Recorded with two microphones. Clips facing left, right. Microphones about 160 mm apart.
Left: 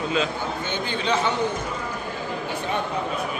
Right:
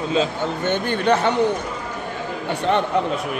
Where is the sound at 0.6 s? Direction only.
60° right (ahead or behind).